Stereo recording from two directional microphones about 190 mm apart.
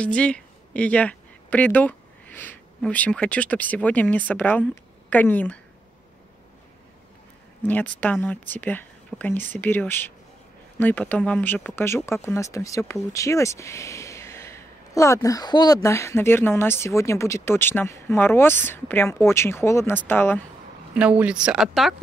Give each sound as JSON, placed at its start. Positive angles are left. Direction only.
{"t": 0.0, "sound": "speech", "side_deg": 5}
{"t": 7.6, "sound": "speech", "side_deg": 10}
{"t": 20.9, "sound": "speech", "side_deg": -5}